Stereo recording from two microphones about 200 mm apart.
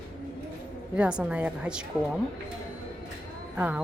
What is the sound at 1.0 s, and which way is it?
Speech, 5° right (ahead or behind).